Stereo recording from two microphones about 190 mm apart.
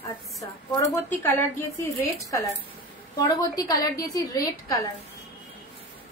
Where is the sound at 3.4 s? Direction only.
20° left (ahead or behind).